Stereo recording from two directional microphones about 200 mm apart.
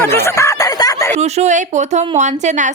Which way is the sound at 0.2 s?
15° left (ahead or behind).